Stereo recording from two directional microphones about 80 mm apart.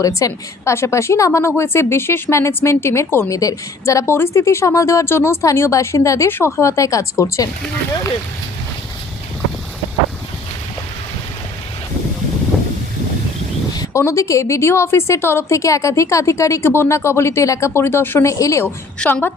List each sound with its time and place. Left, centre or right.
0.0 s a woman's voice: left
3.2 s a woman's voice: left
13.9 s a woman's voice: left
18.3 s a woman's voice: left
18.9 s a woman's voice: centre